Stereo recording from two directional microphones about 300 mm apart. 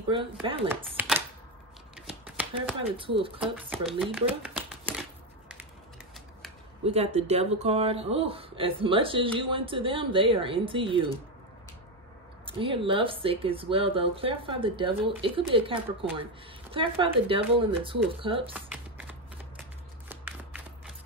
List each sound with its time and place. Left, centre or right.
0.1 s speech: centre
0.9 s typewriter: centre
2.0 s shuffling cards: centre
3.0 s speech: centre
3.3 s speech: centre
4.0 s a sound: centre
6.8 s speech: right
12.4 s speech: centre
18.5 s music: centre
20.1 s shuffling cards: centre